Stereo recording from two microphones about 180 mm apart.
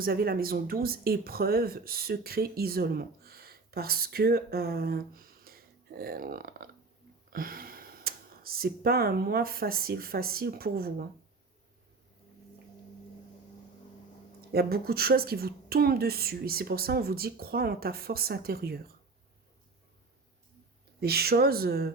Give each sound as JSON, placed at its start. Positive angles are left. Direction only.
{"t": 0.0, "sound": "speech", "side_deg": -55}
{"t": 14.5, "sound": "a woman's voice", "side_deg": -60}
{"t": 21.0, "sound": "a woman's voice", "side_deg": -60}